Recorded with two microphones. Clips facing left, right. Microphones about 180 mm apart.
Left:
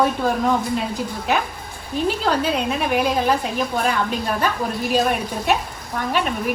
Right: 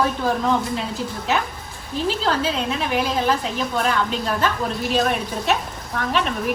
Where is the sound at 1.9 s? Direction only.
55° left (ahead or behind).